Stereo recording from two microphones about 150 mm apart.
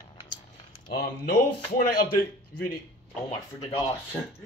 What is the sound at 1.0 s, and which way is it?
A man's voice, 85° left.